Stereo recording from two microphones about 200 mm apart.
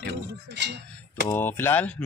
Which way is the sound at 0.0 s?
60° right (ahead or behind).